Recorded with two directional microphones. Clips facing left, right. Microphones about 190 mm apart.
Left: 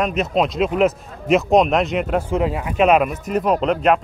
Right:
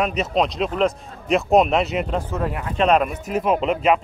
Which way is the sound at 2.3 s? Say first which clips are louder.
Left 5 dB; 15° left (ahead or behind).